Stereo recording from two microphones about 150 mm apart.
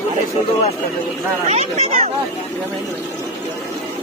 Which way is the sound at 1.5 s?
50° right (ahead or behind).